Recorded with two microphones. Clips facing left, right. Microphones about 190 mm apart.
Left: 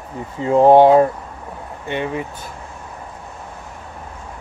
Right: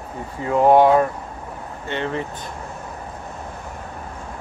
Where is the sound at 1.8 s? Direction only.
15° left (ahead or behind).